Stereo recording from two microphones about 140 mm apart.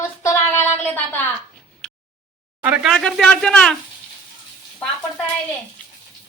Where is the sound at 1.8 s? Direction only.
5° left (ahead or behind).